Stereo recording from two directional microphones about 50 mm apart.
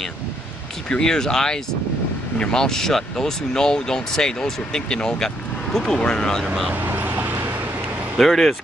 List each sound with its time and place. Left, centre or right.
0.8 s speech: centre
6.7 s vehicle: right
8.2 s speech: centre